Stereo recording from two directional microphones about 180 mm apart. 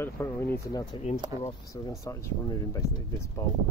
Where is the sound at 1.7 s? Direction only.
20° left (ahead or behind).